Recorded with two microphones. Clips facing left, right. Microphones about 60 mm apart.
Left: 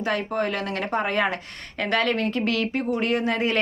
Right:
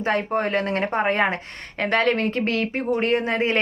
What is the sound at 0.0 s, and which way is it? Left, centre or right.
A woman's voice, right.